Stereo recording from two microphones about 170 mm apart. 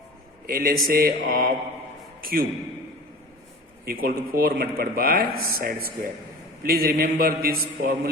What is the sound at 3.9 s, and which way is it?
Speech, 60° right (ahead or behind).